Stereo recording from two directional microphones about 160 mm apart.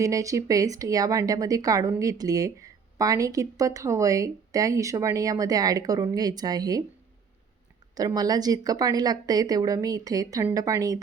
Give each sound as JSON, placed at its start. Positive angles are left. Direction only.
{"t": 0.0, "sound": "speech", "side_deg": -20}
{"t": 7.9, "sound": "speech", "side_deg": -25}